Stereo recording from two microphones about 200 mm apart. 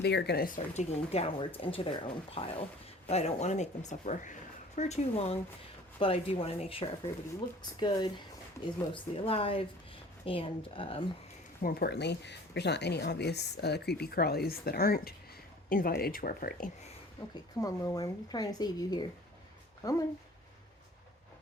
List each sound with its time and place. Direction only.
0.0 s speech: 60° left (ahead or behind); by 11.0 s 30° left (ahead or behind)
11.6 s speech: 50° left (ahead or behind)
17.6 s speech: 15° left (ahead or behind)